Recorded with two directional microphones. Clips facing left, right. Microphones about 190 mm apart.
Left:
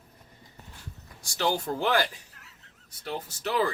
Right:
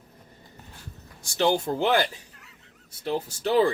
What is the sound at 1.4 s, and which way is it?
Speech, 20° right (ahead or behind).